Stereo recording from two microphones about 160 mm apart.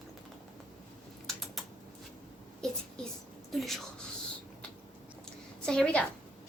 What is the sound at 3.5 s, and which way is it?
Speech, centre (ahead or behind).